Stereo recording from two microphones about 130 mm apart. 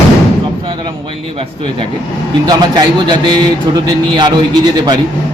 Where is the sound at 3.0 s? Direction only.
35° right (ahead or behind).